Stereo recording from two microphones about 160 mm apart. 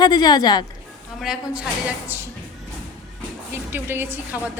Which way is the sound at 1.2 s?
5° right (ahead or behind).